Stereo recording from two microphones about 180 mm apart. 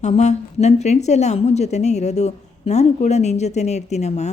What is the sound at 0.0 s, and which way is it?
A woman's voice, 40° left (ahead or behind).